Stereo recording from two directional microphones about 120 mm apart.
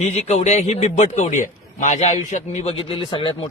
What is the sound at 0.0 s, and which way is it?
A man's voice, 65° left (ahead or behind).